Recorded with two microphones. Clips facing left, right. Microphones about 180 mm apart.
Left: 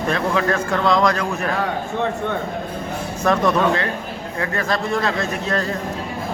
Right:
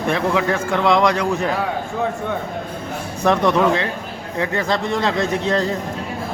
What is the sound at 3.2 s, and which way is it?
A man's voice, 15° right (ahead or behind).